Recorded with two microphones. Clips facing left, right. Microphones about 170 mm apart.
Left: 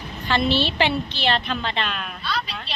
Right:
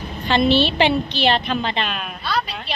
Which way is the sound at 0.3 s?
20° right (ahead or behind).